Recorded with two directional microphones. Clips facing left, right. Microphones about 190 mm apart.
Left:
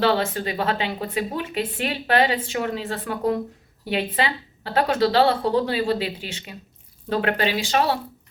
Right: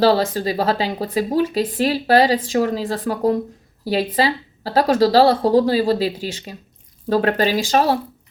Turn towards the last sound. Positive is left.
turn(degrees=-40)  # may be behind; listen again after turning